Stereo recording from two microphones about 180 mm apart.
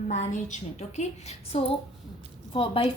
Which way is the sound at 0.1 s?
40° left (ahead or behind).